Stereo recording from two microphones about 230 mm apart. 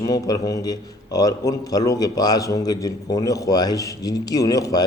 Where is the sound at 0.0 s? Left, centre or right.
Centre.